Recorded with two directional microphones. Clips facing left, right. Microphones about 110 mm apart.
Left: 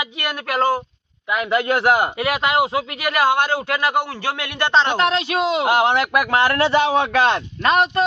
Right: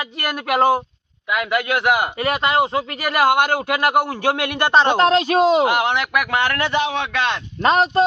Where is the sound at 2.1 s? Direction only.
5° left (ahead or behind).